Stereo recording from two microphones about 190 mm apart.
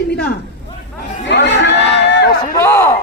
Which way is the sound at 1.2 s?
70° left (ahead or behind).